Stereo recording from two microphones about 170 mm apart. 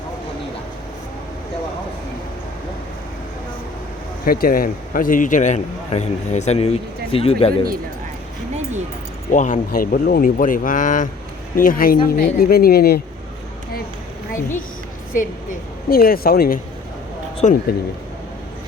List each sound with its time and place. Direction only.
4.3 s a man's voice: 60° left (ahead or behind); by 7.6 s 35° left (ahead or behind)
9.3 s a man's voice: 50° left (ahead or behind)
15.1 s speech: 50° left (ahead or behind)
17.4 s speech: 40° left (ahead or behind)